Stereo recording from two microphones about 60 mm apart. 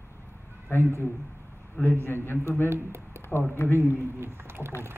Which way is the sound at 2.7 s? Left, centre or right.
Right.